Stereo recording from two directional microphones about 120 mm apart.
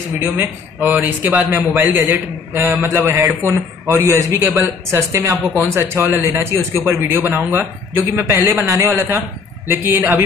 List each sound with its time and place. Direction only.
0.2 s a man's voice: 15° right (ahead or behind)